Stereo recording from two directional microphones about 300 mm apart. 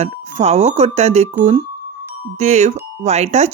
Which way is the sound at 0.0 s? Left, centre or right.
Right.